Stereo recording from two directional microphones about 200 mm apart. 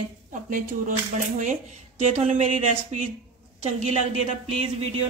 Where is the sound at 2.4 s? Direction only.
40° right (ahead or behind).